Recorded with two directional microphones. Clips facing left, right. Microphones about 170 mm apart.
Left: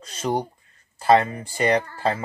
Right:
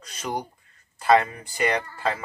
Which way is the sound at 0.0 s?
30° left (ahead or behind).